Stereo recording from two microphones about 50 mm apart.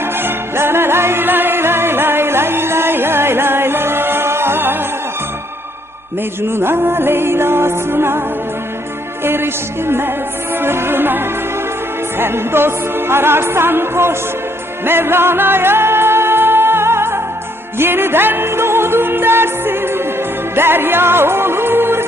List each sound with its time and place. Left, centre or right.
0.0 s music: right
6.5 s music: right
9.2 s music: right